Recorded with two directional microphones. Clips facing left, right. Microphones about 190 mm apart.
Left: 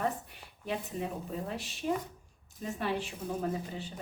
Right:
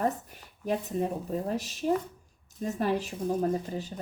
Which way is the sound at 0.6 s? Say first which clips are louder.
Right 6 dB; 45° right (ahead or behind).